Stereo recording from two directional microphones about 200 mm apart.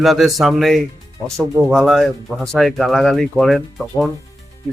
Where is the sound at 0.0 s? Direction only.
Centre (ahead or behind).